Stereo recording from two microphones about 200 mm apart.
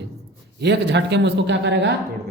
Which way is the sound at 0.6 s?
60° right (ahead or behind).